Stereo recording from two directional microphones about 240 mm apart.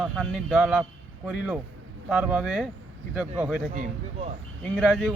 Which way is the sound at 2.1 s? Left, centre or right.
Centre.